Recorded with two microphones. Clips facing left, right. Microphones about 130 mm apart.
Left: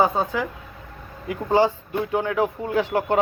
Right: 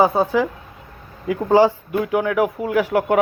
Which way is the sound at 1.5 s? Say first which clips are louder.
Right 4 dB; 15° right (ahead or behind).